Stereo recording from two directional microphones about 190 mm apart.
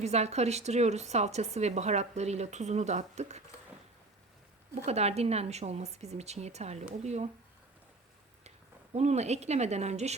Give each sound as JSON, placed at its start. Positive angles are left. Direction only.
{"t": 0.0, "sound": "a woman's voice", "side_deg": -35}
{"t": 4.7, "sound": "a woman's voice", "side_deg": -35}
{"t": 8.4, "sound": "speech", "side_deg": -35}